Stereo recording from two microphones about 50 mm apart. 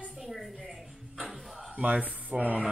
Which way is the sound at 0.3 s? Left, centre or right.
Centre.